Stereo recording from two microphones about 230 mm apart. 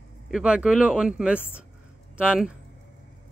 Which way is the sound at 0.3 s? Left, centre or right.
Centre.